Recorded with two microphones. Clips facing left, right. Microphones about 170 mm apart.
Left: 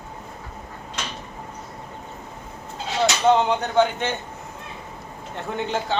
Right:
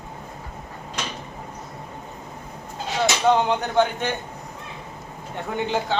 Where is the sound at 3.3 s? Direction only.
Centre (ahead or behind).